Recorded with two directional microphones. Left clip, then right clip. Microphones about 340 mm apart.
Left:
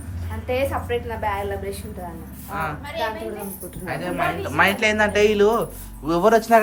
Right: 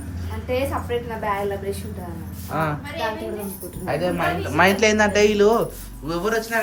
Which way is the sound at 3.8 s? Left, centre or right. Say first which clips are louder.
Right 2 dB; centre.